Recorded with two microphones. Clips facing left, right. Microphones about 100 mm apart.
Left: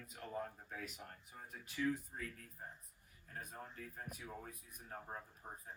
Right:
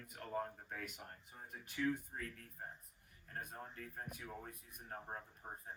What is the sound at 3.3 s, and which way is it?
A man's voice, 55° right (ahead or behind).